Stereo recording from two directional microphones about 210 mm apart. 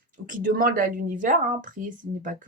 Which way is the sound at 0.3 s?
40° right (ahead or behind).